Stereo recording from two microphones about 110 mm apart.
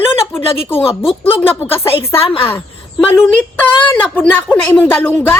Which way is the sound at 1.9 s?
60° left (ahead or behind).